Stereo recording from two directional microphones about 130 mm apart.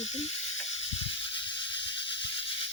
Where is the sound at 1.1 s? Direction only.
40° left (ahead or behind).